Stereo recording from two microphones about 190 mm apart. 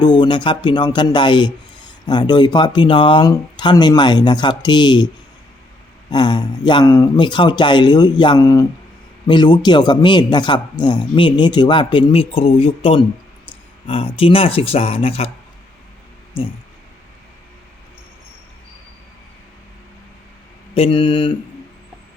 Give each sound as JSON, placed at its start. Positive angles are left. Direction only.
{"t": 0.0, "sound": "a man's voice", "side_deg": 25}
{"t": 6.1, "sound": "a man's voice", "side_deg": 25}
{"t": 20.7, "sound": "a man's voice", "side_deg": 30}